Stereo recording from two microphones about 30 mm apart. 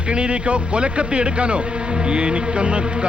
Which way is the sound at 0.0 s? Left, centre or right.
Right.